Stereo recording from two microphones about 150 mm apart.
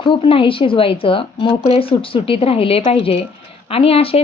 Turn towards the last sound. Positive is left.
turn(degrees=40)  # may be behind; listen again after turning